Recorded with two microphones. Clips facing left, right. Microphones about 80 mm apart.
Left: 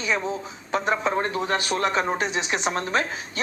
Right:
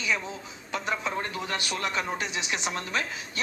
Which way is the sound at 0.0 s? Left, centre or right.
Left.